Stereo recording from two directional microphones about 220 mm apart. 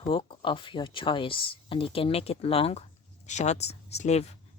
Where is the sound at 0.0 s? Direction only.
25° left (ahead or behind).